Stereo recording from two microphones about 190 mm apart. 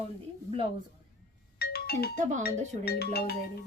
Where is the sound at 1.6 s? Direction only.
55° left (ahead or behind).